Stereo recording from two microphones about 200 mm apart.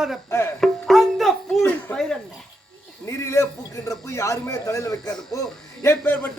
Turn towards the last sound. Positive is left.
turn(degrees=10)  # may be behind; listen again after turning